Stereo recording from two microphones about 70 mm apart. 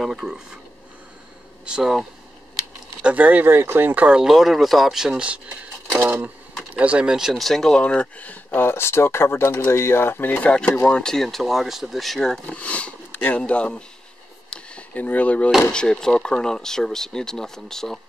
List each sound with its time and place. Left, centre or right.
0.0 s speech: centre
1.7 s speech: centre
3.0 s speech: right
6.0 s a sound: right
6.7 s speech: centre
8.5 s speech: left
10.5 s speech: centre
11.2 s speech: centre
12.5 s speech: centre
13.1 s a sound: left
13.4 s speech: centre
14.5 s a sound: centre
15.7 s speech: centre